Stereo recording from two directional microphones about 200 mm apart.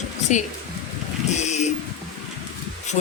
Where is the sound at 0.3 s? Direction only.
35° left (ahead or behind).